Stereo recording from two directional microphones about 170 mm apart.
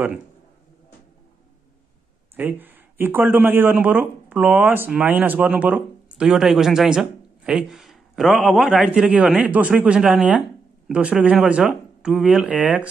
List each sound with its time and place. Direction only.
2.3 s speech: 10° right (ahead or behind)